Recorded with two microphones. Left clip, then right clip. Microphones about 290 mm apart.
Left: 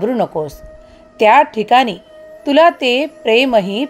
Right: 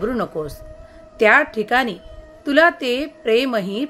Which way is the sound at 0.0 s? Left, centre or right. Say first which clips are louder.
Left 6 dB; centre.